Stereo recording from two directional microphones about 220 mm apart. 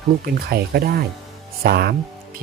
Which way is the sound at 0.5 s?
45° right (ahead or behind).